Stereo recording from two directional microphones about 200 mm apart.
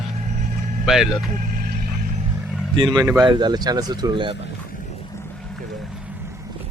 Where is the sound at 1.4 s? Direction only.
45° right (ahead or behind).